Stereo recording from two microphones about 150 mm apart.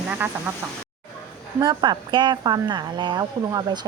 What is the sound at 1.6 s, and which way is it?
A woman's voice, 30° right (ahead or behind).